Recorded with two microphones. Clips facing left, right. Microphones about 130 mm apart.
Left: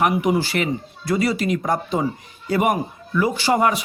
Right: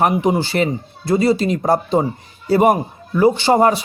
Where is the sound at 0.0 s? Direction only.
30° right (ahead or behind).